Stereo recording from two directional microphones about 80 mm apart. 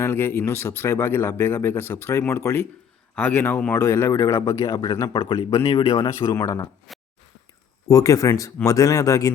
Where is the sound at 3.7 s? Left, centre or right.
Left.